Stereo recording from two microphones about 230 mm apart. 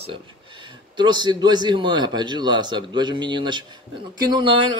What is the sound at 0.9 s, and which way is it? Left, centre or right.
A man's voice, centre.